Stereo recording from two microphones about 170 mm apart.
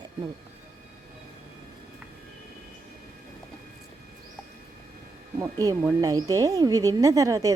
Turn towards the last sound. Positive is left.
turn(degrees=-20)  # may be behind; listen again after turning